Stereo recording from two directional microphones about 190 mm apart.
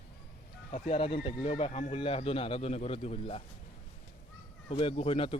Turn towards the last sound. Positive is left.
turn(degrees=30)  # may be behind; listen again after turning